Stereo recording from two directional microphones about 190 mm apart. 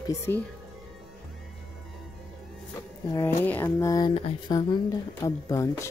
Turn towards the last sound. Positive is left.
turn(degrees=15)  # may be behind; listen again after turning